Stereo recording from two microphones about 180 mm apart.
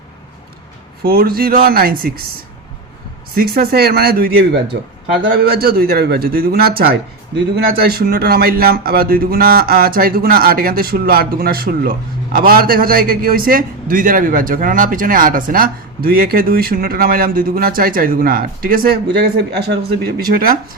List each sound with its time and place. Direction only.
1.0 s speech: 55° right (ahead or behind)
3.3 s speech: 55° right (ahead or behind)
19.5 s speech: 65° right (ahead or behind)